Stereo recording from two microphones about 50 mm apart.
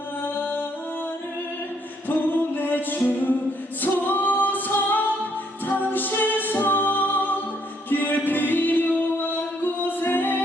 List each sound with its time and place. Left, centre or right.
2.0 s music: left
3.8 s a capella: left
5.6 s music: left